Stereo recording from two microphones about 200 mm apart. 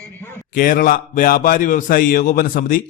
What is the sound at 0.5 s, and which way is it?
A man's voice, 45° left (ahead or behind).